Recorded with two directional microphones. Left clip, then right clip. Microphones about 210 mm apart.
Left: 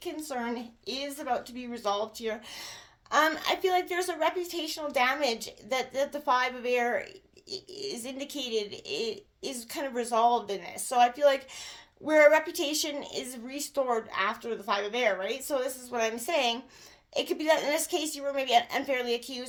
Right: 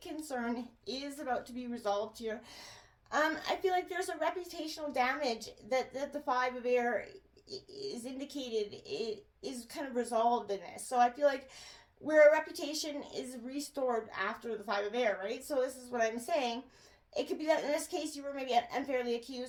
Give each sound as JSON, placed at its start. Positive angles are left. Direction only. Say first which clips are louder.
{"t": 0.0, "sound": "a woman's voice", "louder": "left 5 dB", "side_deg": 35}